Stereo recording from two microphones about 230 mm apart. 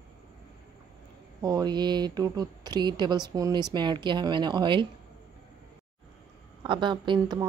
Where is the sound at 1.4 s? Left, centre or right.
Centre.